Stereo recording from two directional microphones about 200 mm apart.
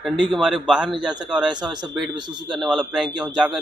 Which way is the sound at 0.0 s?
Centre (ahead or behind).